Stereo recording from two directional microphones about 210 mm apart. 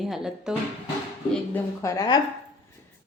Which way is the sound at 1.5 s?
15° left (ahead or behind).